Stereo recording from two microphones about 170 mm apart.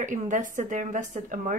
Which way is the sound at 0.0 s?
50° right (ahead or behind).